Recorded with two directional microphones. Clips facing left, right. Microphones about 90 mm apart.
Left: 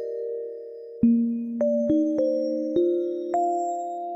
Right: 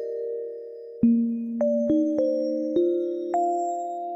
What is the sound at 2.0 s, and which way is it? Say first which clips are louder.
Music: even; 15° left (ahead or behind).